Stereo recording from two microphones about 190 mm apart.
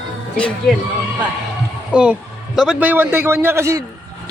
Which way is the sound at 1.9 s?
5° right (ahead or behind).